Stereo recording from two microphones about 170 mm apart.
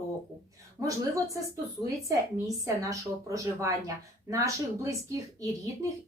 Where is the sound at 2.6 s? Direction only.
20° right (ahead or behind).